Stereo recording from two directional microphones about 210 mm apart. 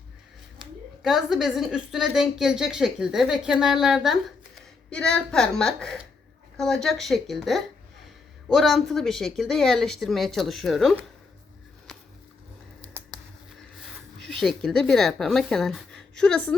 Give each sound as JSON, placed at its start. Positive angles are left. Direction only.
{"t": 1.0, "sound": "a woman's voice", "side_deg": 0}
{"t": 13.5, "sound": "a sound", "side_deg": 0}
{"t": 14.3, "sound": "a woman's voice", "side_deg": 0}